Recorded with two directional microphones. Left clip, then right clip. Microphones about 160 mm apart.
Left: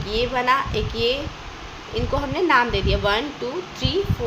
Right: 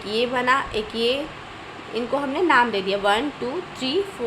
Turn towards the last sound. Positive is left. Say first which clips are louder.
# even
turn(degrees=-10)  # may be behind; listen again after turning